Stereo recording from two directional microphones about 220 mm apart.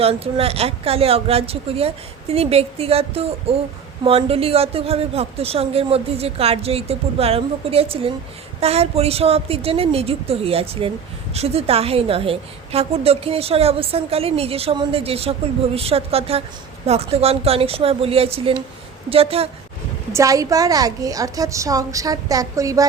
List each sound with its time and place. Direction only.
0.0 s a woman's voice: 25° right (ahead or behind)
20.1 s a woman's voice: 15° right (ahead or behind)